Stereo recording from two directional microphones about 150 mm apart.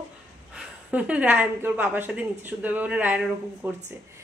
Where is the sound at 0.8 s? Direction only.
10° right (ahead or behind).